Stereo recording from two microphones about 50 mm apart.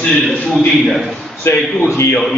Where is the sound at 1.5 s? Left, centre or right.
Left.